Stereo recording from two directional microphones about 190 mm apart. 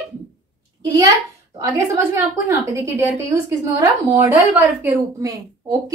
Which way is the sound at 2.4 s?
15° right (ahead or behind).